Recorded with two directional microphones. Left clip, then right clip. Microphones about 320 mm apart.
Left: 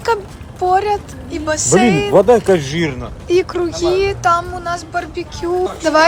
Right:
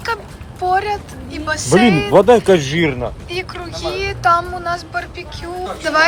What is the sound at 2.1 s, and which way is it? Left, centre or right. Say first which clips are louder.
Speech: right 1 dB; right.